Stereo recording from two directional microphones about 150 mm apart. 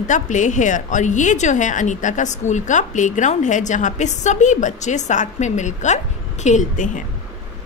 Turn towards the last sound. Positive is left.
turn(degrees=55)  # may be behind; listen again after turning